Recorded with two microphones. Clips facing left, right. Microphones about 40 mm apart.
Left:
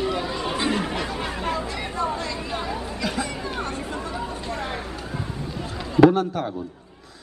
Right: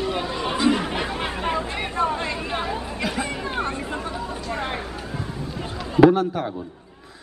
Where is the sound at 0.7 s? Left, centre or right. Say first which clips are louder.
Right 1 dB; centre.